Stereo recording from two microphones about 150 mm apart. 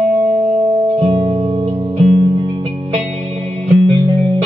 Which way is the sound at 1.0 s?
40° right (ahead or behind).